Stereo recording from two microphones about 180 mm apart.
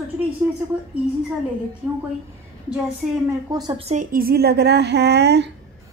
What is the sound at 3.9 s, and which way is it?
A woman's voice, 50° right (ahead or behind).